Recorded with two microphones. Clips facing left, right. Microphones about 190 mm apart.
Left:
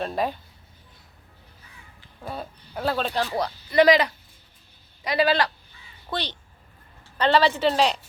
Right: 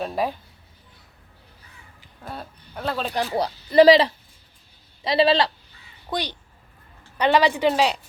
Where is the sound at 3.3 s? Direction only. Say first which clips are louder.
Right 5 dB; 30° right (ahead or behind).